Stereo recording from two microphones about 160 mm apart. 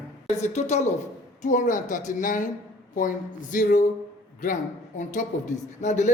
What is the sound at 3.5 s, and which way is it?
Speech, 55° left (ahead or behind).